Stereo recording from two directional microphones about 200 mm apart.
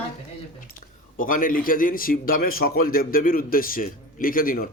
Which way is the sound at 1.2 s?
45° left (ahead or behind).